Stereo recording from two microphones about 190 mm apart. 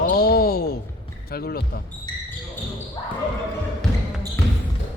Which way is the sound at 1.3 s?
50° left (ahead or behind).